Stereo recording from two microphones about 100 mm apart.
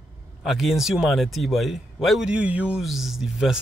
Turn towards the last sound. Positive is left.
turn(degrees=-5)  # may be behind; listen again after turning